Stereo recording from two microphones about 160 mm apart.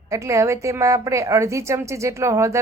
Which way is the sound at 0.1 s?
20° right (ahead or behind).